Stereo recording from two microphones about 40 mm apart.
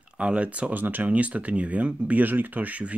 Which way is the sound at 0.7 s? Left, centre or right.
Right.